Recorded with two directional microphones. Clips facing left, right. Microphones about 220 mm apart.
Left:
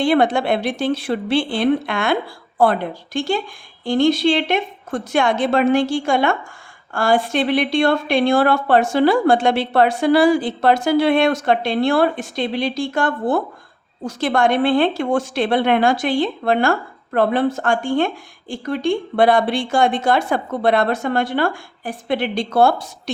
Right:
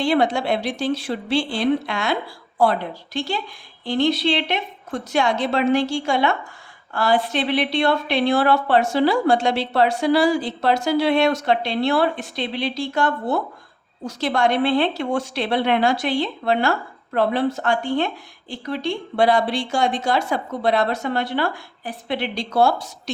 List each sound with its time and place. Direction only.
0.0 s a woman's voice: 55° left (ahead or behind)